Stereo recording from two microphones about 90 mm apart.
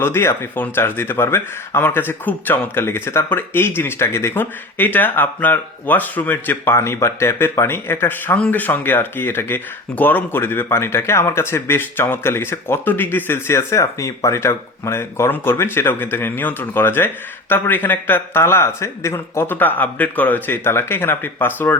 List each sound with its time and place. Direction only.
0.0 s speech: 25° left (ahead or behind)